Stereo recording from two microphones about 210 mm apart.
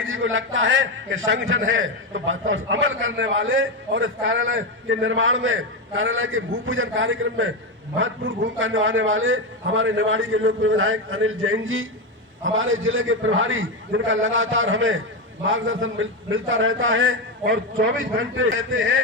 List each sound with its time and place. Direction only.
0.0 s a man's voice: 65° right (ahead or behind)
18.2 s a man's voice: 65° right (ahead or behind)